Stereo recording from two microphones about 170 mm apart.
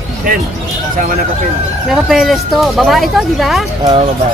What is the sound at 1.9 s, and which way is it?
Speech, centre (ahead or behind).